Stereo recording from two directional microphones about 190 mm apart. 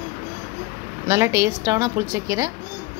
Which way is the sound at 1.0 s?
15° right (ahead or behind).